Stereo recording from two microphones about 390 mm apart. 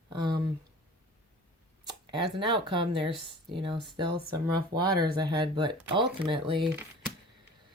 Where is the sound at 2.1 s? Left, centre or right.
Centre.